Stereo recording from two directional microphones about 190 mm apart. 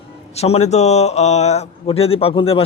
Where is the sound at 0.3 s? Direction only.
35° left (ahead or behind).